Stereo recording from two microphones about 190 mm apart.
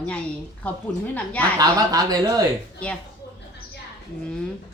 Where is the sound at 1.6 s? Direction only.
20° right (ahead or behind).